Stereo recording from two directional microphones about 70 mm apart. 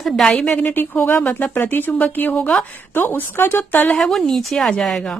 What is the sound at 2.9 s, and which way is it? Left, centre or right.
Speech, left.